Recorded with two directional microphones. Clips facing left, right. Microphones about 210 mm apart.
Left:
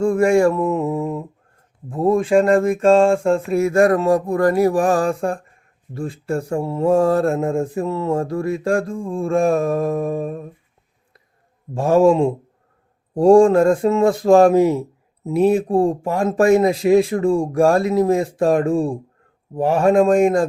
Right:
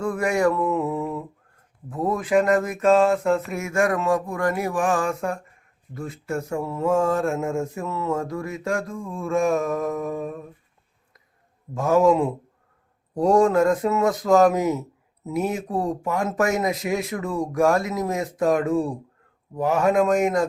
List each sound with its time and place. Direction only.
0.0 s mantra: 25° left (ahead or behind)
1.9 s speech: 25° left (ahead or behind)
11.7 s speech: 30° left (ahead or behind)